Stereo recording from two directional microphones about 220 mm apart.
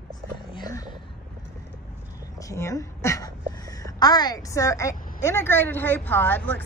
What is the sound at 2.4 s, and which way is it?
A woman's voice, 15° left (ahead or behind).